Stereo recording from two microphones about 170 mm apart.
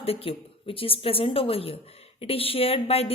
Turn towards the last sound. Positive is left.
turn(degrees=35)  # may be behind; listen again after turning